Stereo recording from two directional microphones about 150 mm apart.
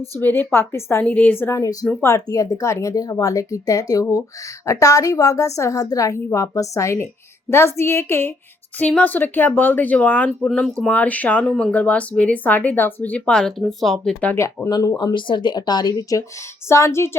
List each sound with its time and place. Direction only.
0.2 s a woman's voice: 10° left (ahead or behind)
14.3 s a woman's voice: 20° left (ahead or behind)